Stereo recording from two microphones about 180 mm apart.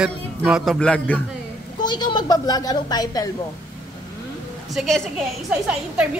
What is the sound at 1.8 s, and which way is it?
A woman's voice, 25° left (ahead or behind).